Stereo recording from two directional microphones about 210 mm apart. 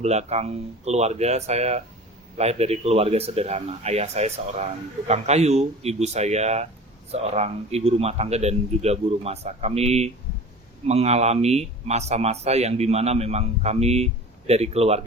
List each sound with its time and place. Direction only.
0.0 s speech: 30° right (ahead or behind)